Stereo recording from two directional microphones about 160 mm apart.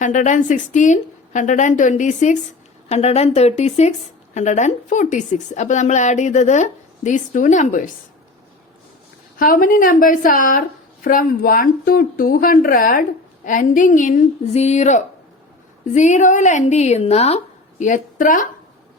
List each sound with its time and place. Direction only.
0.0 s a woman's voice: 50° left (ahead or behind)
9.4 s a woman's voice: 60° left (ahead or behind)
14.5 s a woman's voice: 45° left (ahead or behind)